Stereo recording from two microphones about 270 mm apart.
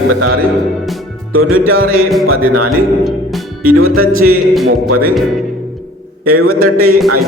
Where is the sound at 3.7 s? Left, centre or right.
Right.